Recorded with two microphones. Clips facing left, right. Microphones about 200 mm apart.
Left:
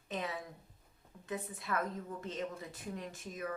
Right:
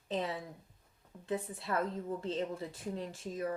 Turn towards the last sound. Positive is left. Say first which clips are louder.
# right 4 dB
turn(degrees=-30)  # may be behind; listen again after turning